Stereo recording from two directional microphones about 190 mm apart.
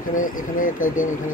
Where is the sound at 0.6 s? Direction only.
45° left (ahead or behind).